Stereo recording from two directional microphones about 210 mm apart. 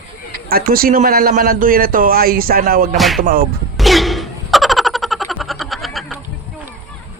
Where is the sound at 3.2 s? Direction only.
45° right (ahead or behind).